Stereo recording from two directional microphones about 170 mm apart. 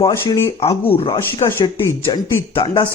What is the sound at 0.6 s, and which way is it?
Speech, 35° left (ahead or behind).